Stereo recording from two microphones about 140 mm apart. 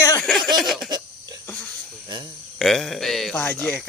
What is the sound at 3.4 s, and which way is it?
Speech, 15° left (ahead or behind).